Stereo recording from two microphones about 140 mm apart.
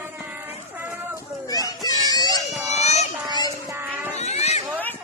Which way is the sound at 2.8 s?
50° left (ahead or behind).